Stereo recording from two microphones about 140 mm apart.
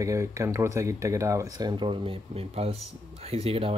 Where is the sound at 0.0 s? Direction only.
20° right (ahead or behind).